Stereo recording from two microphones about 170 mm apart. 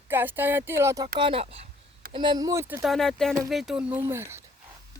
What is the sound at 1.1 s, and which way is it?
Speech, 30° right (ahead or behind).